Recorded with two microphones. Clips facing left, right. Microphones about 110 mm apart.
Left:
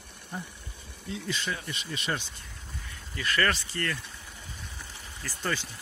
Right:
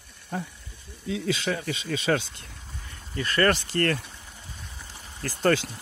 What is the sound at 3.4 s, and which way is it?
Speech, 60° right (ahead or behind).